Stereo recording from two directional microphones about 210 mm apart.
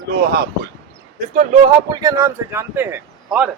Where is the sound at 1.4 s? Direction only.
20° right (ahead or behind); by 3.5 s 5° right (ahead or behind).